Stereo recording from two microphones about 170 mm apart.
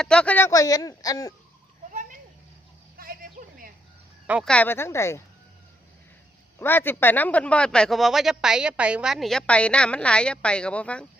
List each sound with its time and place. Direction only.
0.0 s speech: 5° left (ahead or behind); by 1.3 s 20° left (ahead or behind)
1.9 s a sound: 50° right (ahead or behind)
4.4 s speech: 10° left (ahead or behind)
6.6 s a man's voice: 10° left (ahead or behind)